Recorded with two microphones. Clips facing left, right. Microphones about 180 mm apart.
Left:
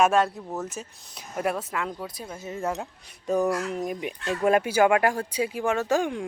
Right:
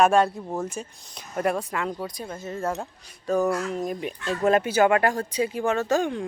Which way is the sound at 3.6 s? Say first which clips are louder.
Right 1 dB; 10° left (ahead or behind).